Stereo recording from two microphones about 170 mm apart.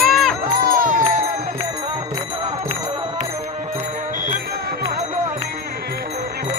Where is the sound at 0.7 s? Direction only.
55° right (ahead or behind).